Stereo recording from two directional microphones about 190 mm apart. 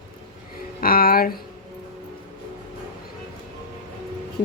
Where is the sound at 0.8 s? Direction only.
50° left (ahead or behind).